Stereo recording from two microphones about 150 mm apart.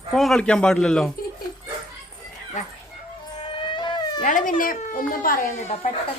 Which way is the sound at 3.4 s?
35° left (ahead or behind).